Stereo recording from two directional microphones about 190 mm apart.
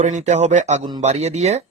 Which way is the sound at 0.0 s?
40° right (ahead or behind).